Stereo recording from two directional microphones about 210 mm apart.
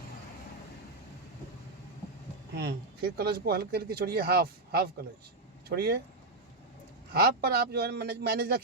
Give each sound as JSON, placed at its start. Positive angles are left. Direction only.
{"t": 2.6, "sound": "speech", "side_deg": -50}
{"t": 7.1, "sound": "speech", "side_deg": -45}